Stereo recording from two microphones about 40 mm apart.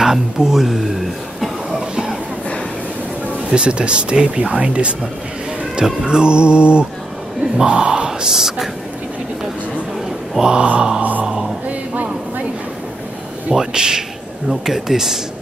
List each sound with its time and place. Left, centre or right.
0.0 s a man's voice: centre
1.7 s a sound: centre
3.4 s speech: right
6.0 s speech: right
10.4 s speech: right
11.0 s a sound: right
13.5 s speech: centre